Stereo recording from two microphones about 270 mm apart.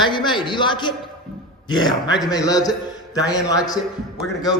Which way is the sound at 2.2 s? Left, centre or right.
Centre.